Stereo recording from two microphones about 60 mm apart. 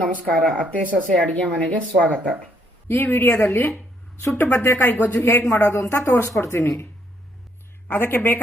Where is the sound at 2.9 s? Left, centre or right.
Left.